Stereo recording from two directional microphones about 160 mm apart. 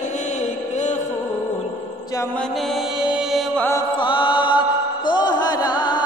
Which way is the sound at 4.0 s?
30° left (ahead or behind).